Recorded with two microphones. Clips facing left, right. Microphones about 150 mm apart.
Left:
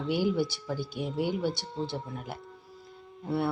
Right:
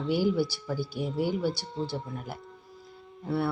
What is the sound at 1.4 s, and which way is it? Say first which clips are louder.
Speech: right 1 dB; 20° left (ahead or behind).